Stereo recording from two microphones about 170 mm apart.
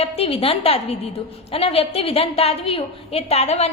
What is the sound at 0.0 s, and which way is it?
A woman's voice, 35° left (ahead or behind).